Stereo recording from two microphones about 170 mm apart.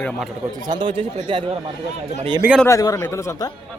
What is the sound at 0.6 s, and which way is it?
Speech, 25° right (ahead or behind).